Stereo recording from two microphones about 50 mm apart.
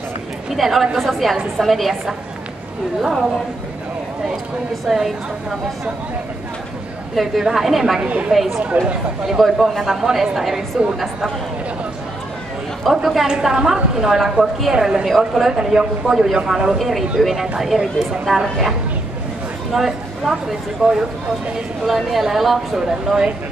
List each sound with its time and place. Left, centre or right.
0.6 s a woman's voice: centre
4.8 s a woman's voice: centre
7.2 s a woman's voice: centre
8.0 s a woman's voice: right
8.3 s a woman's voice: centre
12.8 s a woman's voice: centre
15.0 s a woman's voice: centre
15.5 s a woman's voice: centre